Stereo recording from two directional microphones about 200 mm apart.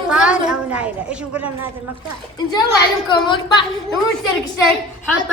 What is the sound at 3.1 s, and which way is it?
Speech, 20° left (ahead or behind).